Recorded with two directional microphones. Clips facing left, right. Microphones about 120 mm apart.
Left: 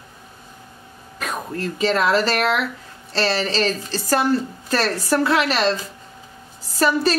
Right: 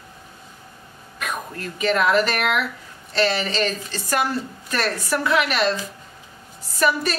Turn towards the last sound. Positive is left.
turn(degrees=30)  # may be behind; listen again after turning